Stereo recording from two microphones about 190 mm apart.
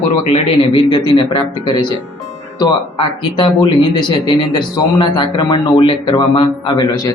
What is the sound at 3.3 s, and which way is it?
Speech, 25° left (ahead or behind).